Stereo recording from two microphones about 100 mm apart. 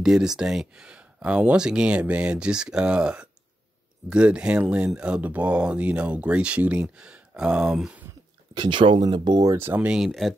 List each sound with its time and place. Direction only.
0.0 s speech: 5° right (ahead or behind)
8.5 s speech: 55° right (ahead or behind); by 9.6 s 40° right (ahead or behind)
9.6 s speech: 20° right (ahead or behind)
9.9 s speech: centre (ahead or behind)